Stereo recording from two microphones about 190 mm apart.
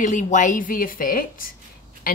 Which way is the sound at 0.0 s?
40° left (ahead or behind).